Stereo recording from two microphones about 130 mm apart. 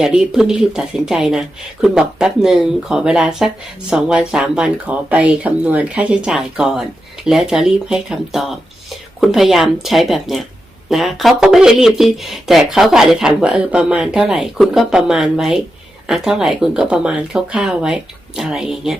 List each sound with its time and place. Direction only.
0.0 s speech: 5° right (ahead or behind)